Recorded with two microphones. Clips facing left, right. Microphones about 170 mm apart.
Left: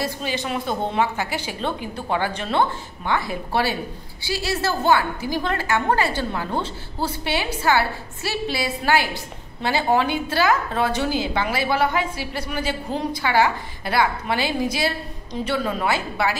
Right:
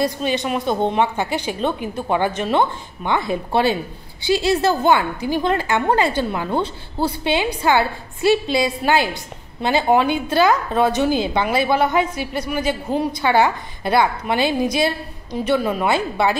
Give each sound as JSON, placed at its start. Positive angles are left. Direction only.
{"t": 0.2, "sound": "a woman's voice", "side_deg": -20}